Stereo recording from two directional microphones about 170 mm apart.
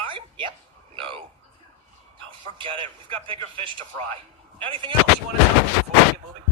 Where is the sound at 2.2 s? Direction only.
30° right (ahead or behind).